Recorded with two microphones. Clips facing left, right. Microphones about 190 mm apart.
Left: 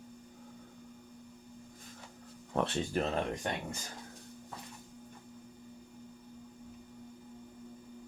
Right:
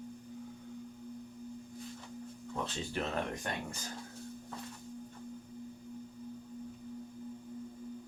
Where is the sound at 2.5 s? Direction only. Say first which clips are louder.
Left 7 dB; 65° left (ahead or behind).